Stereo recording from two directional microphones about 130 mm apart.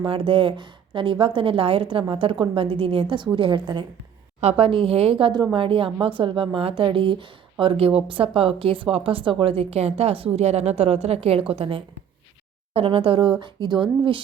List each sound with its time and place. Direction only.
0.0 s speech: 40° right (ahead or behind)